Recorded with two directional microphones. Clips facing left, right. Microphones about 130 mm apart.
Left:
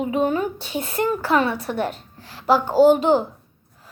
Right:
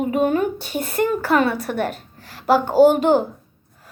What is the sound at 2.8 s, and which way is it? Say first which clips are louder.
Speech: right 1 dB; 50° right (ahead or behind).